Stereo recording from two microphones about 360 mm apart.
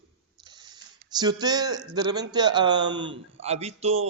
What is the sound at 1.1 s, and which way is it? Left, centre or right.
Speech, centre.